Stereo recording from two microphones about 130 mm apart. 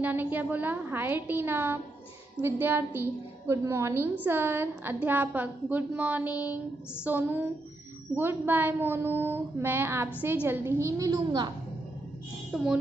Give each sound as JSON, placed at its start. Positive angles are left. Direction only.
{"t": 0.0, "sound": "a woman's voice", "side_deg": -15}
{"t": 12.4, "sound": "a child's voice", "side_deg": -5}